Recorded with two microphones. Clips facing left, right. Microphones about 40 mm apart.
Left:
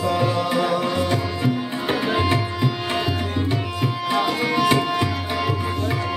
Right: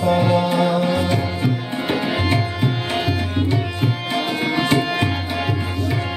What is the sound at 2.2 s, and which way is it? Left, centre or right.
Tabla, right.